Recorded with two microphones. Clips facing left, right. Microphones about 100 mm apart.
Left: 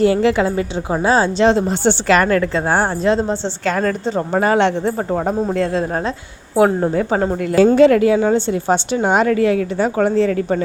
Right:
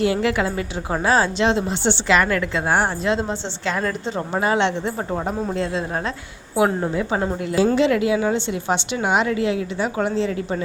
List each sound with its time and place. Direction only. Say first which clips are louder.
0.0 s a woman's voice: left 6 dB; 30° left (ahead or behind)
4.4 s a woman's voice: left 5 dB; 45° left (ahead or behind)